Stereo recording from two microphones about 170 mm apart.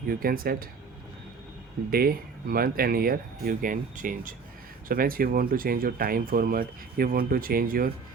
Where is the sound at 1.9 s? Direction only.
60° right (ahead or behind).